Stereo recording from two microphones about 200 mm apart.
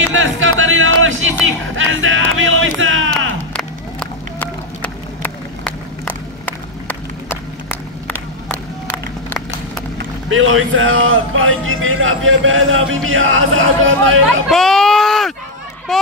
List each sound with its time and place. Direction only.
0.1 s music: 75° right (ahead or behind)
3.5 s run: 5° left (ahead or behind)
8.1 s a sound: 10° left (ahead or behind)
9.9 s speech: 80° right
14.5 s a sound: centre (ahead or behind)
15.9 s speech: centre (ahead or behind)